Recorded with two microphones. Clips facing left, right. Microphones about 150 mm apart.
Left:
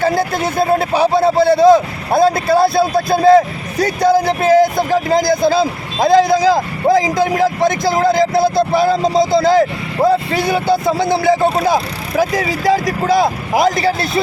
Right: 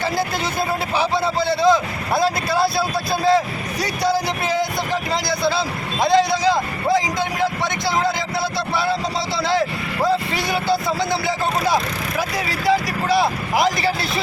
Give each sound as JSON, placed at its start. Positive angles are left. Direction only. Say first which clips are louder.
{"t": 0.0, "sound": "speech", "louder": "left 7 dB", "side_deg": 50}
{"t": 12.6, "sound": "speech", "louder": "left 3 dB", "side_deg": 45}